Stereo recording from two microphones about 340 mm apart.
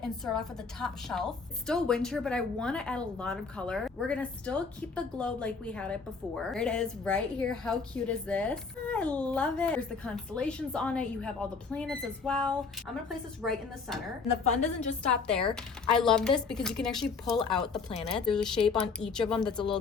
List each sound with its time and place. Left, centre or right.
0.0 s a woman's voice: centre
14.3 s a woman's voice: centre
15.1 s a woman's voice: centre
17.8 s speech: centre
18.3 s a woman's voice: centre